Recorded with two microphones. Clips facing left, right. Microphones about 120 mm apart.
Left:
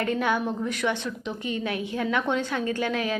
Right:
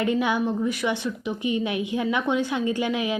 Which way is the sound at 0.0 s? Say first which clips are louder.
Right 2 dB; 10° right (ahead or behind).